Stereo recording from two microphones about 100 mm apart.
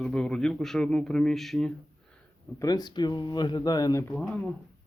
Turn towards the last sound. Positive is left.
turn(degrees=15)  # may be behind; listen again after turning